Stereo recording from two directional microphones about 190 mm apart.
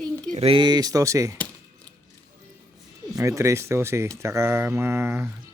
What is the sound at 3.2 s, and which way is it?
Speech, 15° right (ahead or behind).